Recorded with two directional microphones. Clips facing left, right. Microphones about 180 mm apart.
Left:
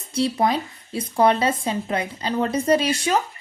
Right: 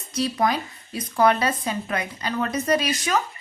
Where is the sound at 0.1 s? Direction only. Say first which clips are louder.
Left 2 dB; 30° left (ahead or behind).